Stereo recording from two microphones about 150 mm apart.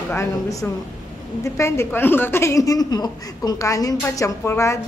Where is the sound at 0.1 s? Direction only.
20° left (ahead or behind).